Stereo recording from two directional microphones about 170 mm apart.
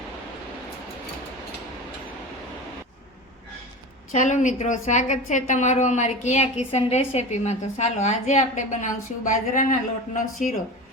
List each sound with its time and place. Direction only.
4.1 s a woman's voice: 45° left (ahead or behind)